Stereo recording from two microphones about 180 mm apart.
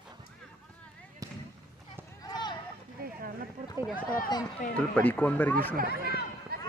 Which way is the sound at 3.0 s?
50° right (ahead or behind).